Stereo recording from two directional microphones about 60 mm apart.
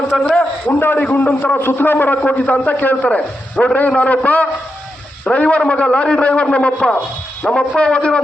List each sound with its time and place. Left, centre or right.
0.2 s a man's voice: left
7.4 s a man's voice: centre
7.8 s speech: centre